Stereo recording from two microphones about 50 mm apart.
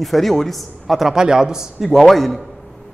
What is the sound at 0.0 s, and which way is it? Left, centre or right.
A woman's voice, centre.